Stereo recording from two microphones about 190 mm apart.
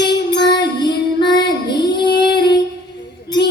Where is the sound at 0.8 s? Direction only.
25° left (ahead or behind).